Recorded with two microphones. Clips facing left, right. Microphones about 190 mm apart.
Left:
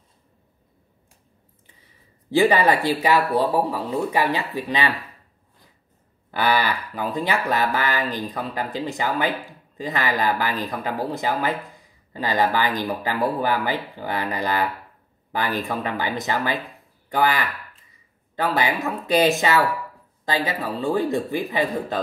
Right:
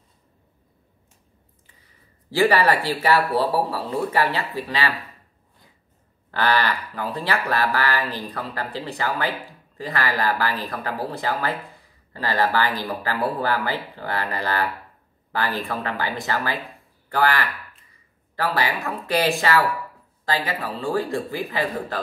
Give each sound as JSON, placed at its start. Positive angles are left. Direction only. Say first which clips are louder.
{"t": 2.3, "sound": "speech", "louder": "left 1 dB", "side_deg": 15}
{"t": 6.3, "sound": "a man's voice", "louder": "even", "side_deg": 10}